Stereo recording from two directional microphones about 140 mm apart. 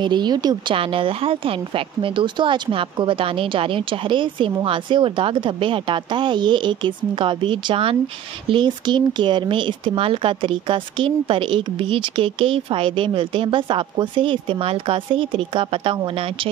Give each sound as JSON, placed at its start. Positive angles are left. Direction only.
{"t": 0.0, "sound": "a woman's voice", "side_deg": -30}